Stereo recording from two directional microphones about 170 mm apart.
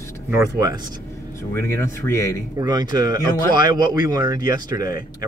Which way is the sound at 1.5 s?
15° left (ahead or behind).